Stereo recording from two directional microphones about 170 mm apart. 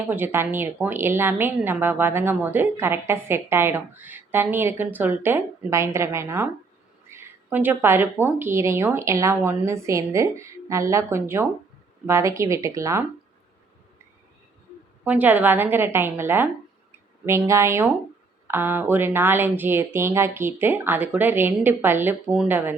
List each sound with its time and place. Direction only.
0.1 s a woman's voice: 10° right (ahead or behind)
15.0 s a woman's voice: 10° right (ahead or behind)